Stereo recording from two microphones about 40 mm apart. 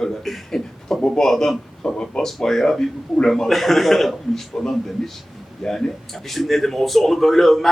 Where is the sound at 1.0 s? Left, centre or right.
Centre.